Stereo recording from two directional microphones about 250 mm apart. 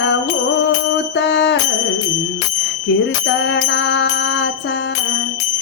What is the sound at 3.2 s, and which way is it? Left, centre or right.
Music, left.